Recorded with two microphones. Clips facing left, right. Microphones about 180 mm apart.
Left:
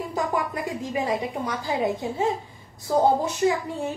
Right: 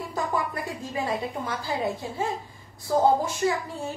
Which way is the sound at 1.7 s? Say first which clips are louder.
Left 5 dB; 20° left (ahead or behind).